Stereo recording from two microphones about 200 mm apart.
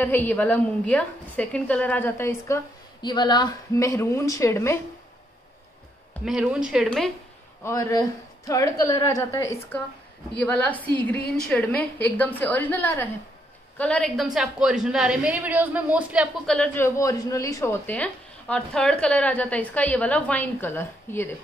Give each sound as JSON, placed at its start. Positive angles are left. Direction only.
{"t": 0.0, "sound": "a woman's voice", "side_deg": 10}
{"t": 6.2, "sound": "a woman's voice", "side_deg": -5}
{"t": 7.6, "sound": "a woman's voice", "side_deg": 15}